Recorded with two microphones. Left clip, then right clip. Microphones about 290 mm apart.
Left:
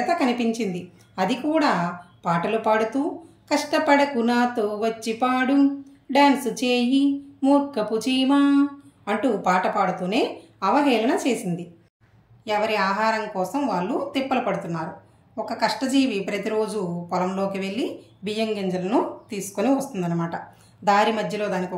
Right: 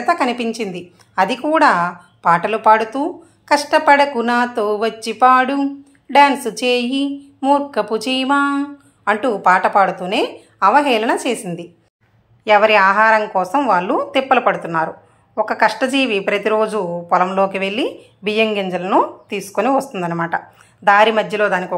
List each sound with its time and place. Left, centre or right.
0.0 s speech: centre
12.4 s speech: right